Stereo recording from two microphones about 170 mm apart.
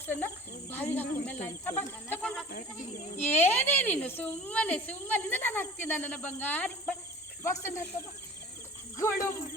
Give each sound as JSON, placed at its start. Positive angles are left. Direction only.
{"t": 0.7, "sound": "speech", "side_deg": 10}
{"t": 9.0, "sound": "speech", "side_deg": 15}